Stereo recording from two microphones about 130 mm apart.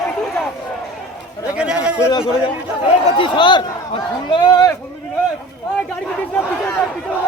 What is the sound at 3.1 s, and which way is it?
Speech, 40° left (ahead or behind).